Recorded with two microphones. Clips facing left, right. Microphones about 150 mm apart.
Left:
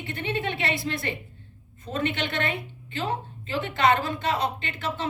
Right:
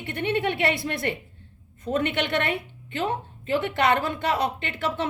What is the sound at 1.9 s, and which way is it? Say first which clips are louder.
A woman's voice: right 4 dB; 60° right (ahead or behind).